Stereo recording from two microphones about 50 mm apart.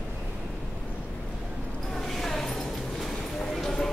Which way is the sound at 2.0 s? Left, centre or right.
Centre.